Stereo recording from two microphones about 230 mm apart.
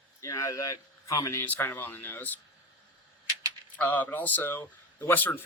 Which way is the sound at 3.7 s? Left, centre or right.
Centre.